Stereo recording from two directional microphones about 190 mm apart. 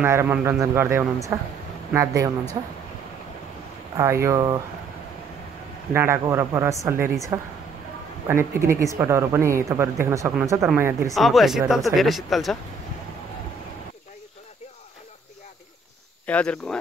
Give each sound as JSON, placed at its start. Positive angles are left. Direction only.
{"t": 0.0, "sound": "a woman's voice", "side_deg": -10}
{"t": 3.9, "sound": "a woman's voice", "side_deg": -15}
{"t": 5.9, "sound": "a woman's voice", "side_deg": -15}
{"t": 11.1, "sound": "speech", "side_deg": 0}
{"t": 16.3, "sound": "speech", "side_deg": 5}